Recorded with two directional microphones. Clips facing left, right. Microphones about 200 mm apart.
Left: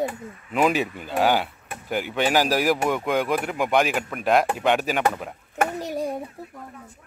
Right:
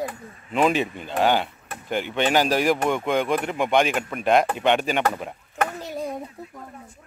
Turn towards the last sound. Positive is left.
turn(degrees=15)  # may be behind; listen again after turning